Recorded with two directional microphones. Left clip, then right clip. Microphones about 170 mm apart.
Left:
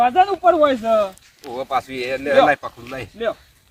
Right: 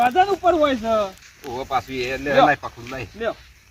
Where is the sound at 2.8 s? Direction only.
5° left (ahead or behind).